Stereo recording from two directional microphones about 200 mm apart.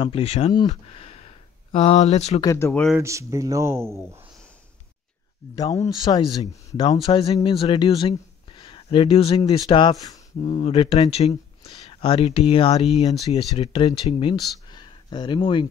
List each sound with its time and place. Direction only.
0.0 s speech: 30° left (ahead or behind)
2.4 s speech: 15° left (ahead or behind)
3.0 s speech: 15° right (ahead or behind)
5.6 s speech: 20° left (ahead or behind)